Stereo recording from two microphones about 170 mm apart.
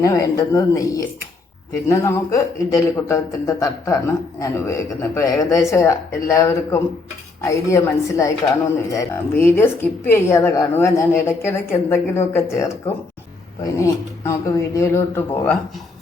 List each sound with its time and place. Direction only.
0.0 s a man's voice: 20° left (ahead or behind)
13.7 s a man's voice: 20° left (ahead or behind)